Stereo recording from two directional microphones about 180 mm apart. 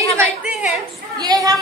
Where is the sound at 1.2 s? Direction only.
20° right (ahead or behind).